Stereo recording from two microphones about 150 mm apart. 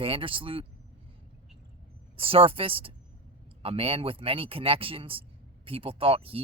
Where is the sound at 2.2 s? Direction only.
40° right (ahead or behind).